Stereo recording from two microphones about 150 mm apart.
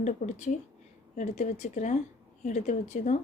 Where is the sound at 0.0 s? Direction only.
55° left (ahead or behind).